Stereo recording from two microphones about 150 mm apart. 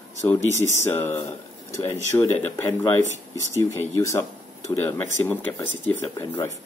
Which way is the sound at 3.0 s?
55° left (ahead or behind).